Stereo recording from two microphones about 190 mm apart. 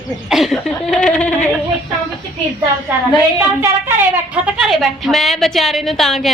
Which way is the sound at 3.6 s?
10° right (ahead or behind).